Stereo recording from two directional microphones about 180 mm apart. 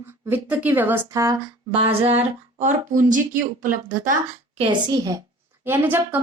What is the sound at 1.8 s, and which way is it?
Speech, 35° right (ahead or behind).